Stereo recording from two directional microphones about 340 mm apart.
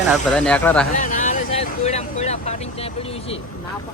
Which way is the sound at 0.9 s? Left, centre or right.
Left.